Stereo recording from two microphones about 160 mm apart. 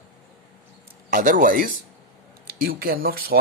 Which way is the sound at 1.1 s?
55° right (ahead or behind).